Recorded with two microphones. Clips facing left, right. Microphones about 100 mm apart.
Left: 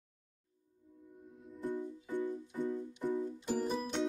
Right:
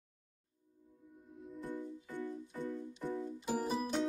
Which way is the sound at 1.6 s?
15° left (ahead or behind).